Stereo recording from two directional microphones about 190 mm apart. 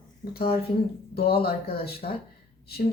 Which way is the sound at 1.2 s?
55° left (ahead or behind).